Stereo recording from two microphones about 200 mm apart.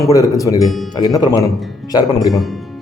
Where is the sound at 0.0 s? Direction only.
15° left (ahead or behind).